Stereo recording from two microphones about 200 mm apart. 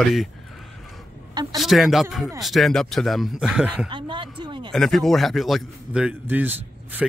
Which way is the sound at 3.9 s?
25° right (ahead or behind).